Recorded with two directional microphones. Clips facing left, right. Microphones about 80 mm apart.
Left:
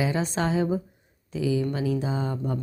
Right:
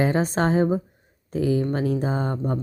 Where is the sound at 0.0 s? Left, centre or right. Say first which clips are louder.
Right 5 dB; right.